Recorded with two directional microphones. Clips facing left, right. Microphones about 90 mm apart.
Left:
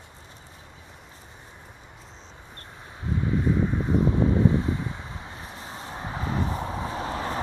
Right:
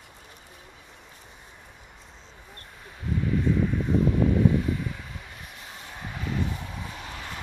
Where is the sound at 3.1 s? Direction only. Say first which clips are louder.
Even; 25° left (ahead or behind).